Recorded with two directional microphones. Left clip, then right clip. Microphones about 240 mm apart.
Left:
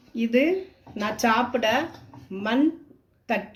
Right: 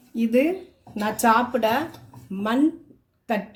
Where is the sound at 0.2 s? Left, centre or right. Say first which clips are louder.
Right 1 dB; right.